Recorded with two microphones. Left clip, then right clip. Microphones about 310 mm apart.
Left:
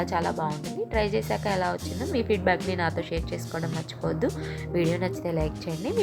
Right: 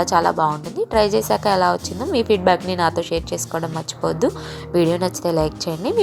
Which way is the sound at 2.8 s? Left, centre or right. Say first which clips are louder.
Right 9 dB; centre.